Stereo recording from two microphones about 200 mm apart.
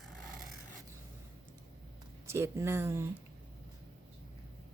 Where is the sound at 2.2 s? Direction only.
15° right (ahead or behind).